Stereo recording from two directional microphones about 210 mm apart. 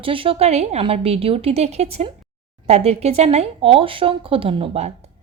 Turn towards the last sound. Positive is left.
turn(degrees=-30)  # may be behind; listen again after turning